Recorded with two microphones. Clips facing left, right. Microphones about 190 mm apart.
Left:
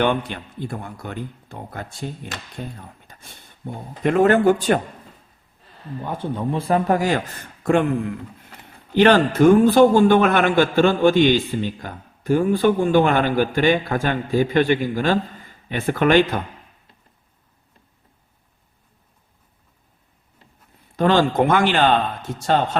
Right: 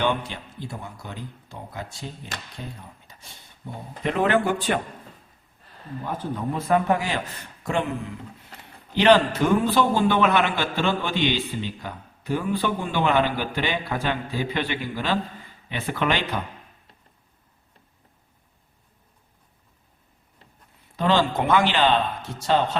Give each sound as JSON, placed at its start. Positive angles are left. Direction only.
{"t": 0.0, "sound": "a man's voice", "side_deg": 55}
{"t": 3.1, "sound": "a sound", "side_deg": 55}
{"t": 4.0, "sound": "a man's voice", "side_deg": 45}
{"t": 6.3, "sound": "a man's voice", "side_deg": 30}
{"t": 20.9, "sound": "a man's voice", "side_deg": 50}